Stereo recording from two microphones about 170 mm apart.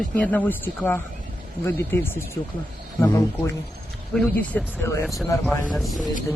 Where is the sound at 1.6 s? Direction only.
15° left (ahead or behind).